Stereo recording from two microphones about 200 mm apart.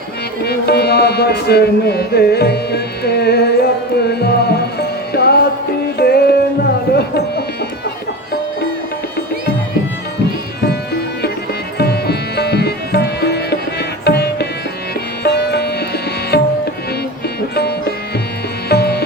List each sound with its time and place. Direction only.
0.4 s music: 55° left (ahead or behind)
11.8 s music: 50° left (ahead or behind)